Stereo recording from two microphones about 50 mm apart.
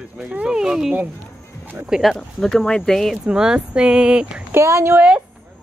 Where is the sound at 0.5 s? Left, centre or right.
Centre.